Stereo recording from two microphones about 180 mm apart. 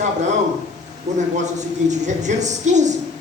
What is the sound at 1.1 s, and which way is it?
A woman's voice, 40° right (ahead or behind).